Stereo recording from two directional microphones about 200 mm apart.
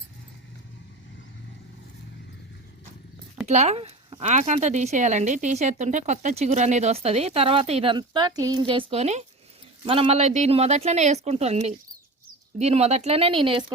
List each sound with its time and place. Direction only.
3.4 s speech: 35° right (ahead or behind)